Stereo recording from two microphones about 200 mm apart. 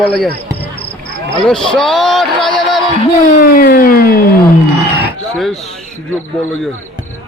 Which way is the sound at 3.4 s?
45° left (ahead or behind).